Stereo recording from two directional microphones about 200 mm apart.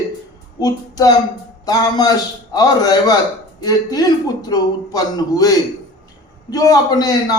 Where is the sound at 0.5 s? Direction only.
20° left (ahead or behind).